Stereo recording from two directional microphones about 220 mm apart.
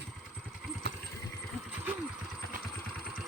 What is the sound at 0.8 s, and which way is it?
Vehicle, 50° right (ahead or behind).